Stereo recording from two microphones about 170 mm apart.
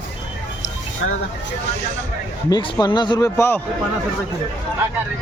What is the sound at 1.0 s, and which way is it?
Speech, 90° left.